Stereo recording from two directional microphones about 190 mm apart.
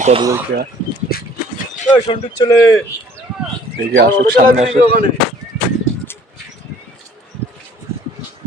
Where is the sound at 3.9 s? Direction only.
50° right (ahead or behind).